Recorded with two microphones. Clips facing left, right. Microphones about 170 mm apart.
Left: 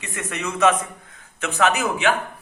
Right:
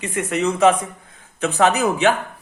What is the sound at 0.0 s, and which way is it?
Speech, 30° right (ahead or behind).